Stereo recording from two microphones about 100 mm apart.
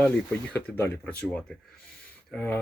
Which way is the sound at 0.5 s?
15° left (ahead or behind).